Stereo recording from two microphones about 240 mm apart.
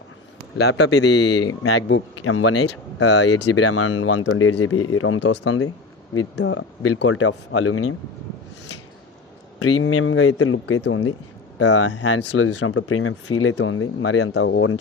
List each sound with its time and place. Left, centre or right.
0.5 s speech: left
0.9 s speech: left
9.6 s speech: left
12.5 s speech: left